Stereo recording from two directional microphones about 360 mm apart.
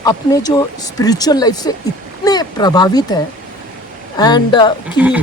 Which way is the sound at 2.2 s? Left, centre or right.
Centre.